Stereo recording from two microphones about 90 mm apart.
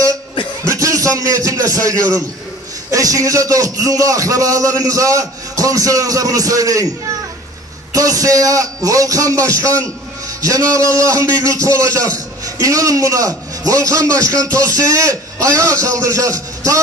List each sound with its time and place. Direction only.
0.7 s a sound: 40° right (ahead or behind)
2.9 s a man's voice: 40° right (ahead or behind)
7.9 s a man's voice: 40° right (ahead or behind)